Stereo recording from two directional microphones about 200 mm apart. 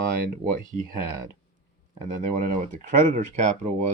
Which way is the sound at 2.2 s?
40° right (ahead or behind).